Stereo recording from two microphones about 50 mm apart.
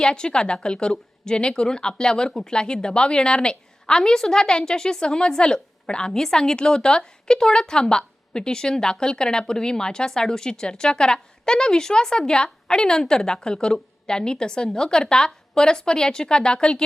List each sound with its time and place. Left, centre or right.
0.0 s a woman's voice: centre